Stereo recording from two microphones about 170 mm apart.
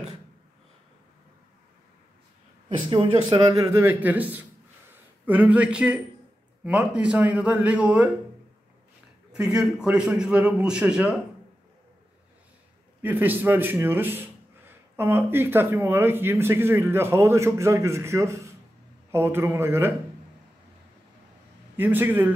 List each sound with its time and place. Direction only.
2.9 s a man's voice: 25° right (ahead or behind); by 8.1 s 5° right (ahead or behind)
9.3 s a man's voice: 5° right (ahead or behind)
13.0 s a man's voice: 10° right (ahead or behind)
21.7 s a man's voice: 10° right (ahead or behind)